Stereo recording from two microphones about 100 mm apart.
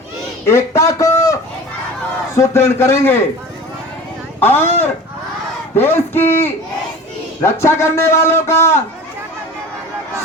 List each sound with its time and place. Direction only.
0.4 s a man's voice: 25° left (ahead or behind)
4.4 s a man's voice: 20° left (ahead or behind)